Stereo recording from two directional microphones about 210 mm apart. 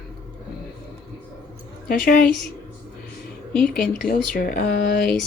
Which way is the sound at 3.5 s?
40° left (ahead or behind).